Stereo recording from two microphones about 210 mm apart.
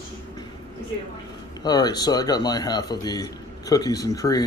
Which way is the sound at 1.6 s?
20° left (ahead or behind).